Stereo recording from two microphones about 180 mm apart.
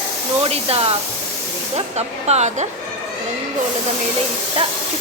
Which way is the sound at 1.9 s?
35° right (ahead or behind).